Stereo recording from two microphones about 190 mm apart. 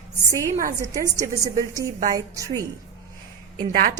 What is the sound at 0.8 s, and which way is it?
A woman's voice, 15° right (ahead or behind).